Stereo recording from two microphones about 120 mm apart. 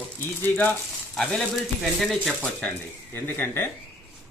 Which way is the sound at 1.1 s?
5° left (ahead or behind).